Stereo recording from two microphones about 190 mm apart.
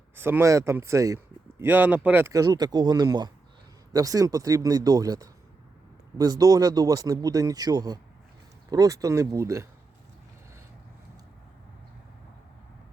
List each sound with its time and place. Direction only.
0.2 s speech: 10° right (ahead or behind)